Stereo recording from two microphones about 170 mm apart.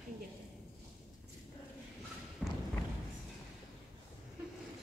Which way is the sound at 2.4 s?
Centre (ahead or behind).